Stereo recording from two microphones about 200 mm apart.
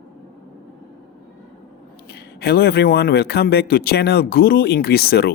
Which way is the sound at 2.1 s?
55° left (ahead or behind).